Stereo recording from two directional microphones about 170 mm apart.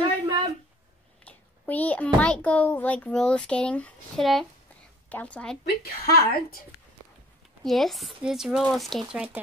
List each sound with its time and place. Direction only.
0.0 s a sound: 25° right (ahead or behind)
1.2 s a child's voice: 10° left (ahead or behind)
5.8 s a woman's voice: 65° left (ahead or behind)
7.6 s speech: centre (ahead or behind)